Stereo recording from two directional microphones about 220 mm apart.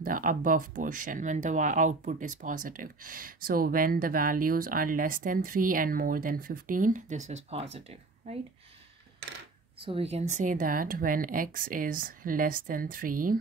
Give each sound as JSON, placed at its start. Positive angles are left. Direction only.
{"t": 0.0, "sound": "speech", "side_deg": -40}
{"t": 9.8, "sound": "speech", "side_deg": -25}